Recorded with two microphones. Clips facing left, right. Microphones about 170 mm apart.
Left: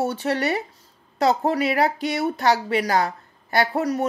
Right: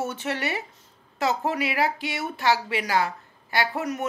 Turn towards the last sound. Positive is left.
turn(degrees=35)  # may be behind; listen again after turning